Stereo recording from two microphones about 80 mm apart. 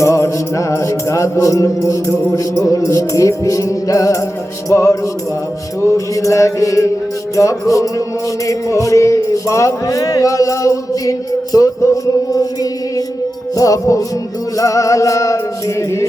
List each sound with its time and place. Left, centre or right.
0.0 s music: left
13.6 s music: left